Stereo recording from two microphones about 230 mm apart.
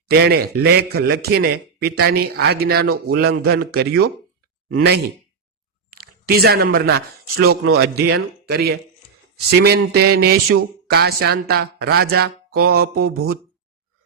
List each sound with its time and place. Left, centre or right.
0.1 s a man's voice: right